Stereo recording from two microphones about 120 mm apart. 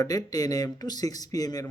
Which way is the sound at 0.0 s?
30° left (ahead or behind).